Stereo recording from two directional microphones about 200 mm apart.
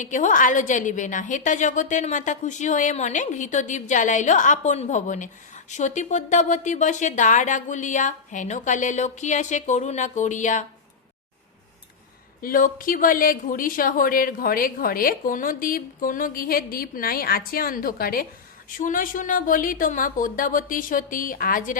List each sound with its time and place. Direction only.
0.0 s a woman's voice: 40° left (ahead or behind)
12.4 s speech: 45° left (ahead or behind)